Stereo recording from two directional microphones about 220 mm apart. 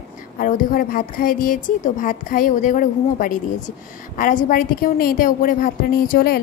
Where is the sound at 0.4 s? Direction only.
40° left (ahead or behind).